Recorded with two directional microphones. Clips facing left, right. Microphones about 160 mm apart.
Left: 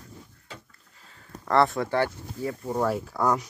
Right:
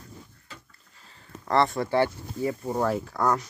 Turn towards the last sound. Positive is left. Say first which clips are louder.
# even
turn(degrees=10)  # may be behind; listen again after turning